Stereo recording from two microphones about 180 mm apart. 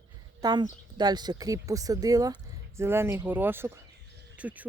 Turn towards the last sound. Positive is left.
turn(degrees=-10)  # may be behind; listen again after turning